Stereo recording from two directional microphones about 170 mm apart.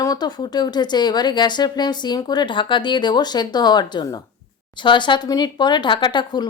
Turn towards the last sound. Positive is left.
turn(degrees=25)  # may be behind; listen again after turning